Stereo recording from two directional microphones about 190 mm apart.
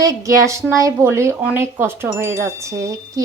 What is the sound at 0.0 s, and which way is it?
Chime, 15° right (ahead or behind).